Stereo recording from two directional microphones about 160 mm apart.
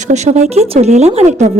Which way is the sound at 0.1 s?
45° right (ahead or behind).